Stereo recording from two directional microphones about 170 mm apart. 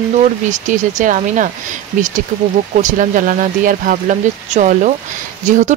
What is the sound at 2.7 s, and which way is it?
A woman's voice, 50° right (ahead or behind).